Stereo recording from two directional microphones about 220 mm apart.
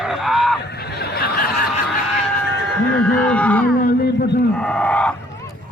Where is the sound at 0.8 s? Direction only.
45° left (ahead or behind).